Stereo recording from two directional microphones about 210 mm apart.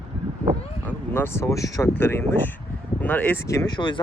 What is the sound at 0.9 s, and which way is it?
Speech, 10° left (ahead or behind).